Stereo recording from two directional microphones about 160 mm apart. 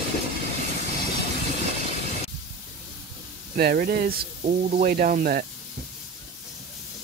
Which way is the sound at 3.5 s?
65° right (ahead or behind).